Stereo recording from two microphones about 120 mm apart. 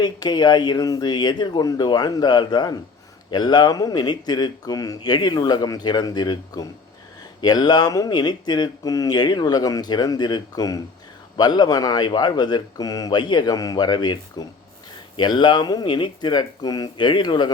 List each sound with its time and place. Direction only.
0.0 s speech: 35° left (ahead or behind)